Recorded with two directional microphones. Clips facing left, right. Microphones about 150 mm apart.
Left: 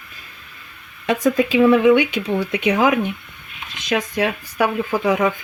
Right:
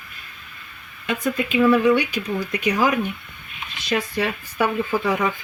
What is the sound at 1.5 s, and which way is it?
Speech, 25° left (ahead or behind).